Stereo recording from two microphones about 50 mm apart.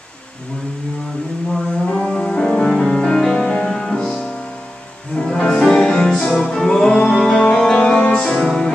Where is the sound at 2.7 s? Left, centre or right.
Centre.